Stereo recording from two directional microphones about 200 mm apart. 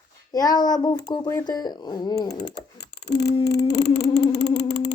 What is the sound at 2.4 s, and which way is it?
Typing, 55° left (ahead or behind).